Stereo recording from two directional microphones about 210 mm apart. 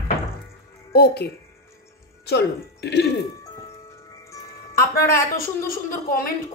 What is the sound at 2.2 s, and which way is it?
Speech, 55° left (ahead or behind).